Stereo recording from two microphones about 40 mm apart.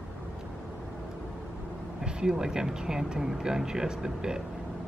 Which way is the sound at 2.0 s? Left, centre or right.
Centre.